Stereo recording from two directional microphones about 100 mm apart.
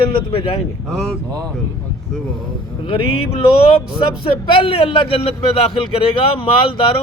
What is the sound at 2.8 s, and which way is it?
Speech, 65° left (ahead or behind).